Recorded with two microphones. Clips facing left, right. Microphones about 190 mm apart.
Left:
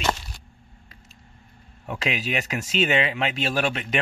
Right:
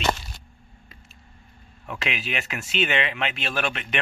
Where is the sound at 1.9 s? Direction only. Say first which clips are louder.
Left 3 dB; 35° left (ahead or behind).